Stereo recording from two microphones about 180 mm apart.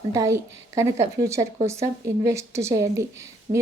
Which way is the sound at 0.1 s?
15° right (ahead or behind).